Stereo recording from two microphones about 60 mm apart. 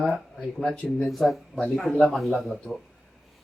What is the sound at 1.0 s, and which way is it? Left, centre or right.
Speech, centre.